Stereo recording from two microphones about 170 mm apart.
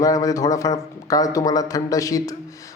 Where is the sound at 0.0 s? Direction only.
20° left (ahead or behind).